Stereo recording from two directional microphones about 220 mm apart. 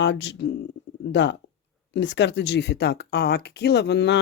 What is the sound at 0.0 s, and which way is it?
Speech, 55° left (ahead or behind).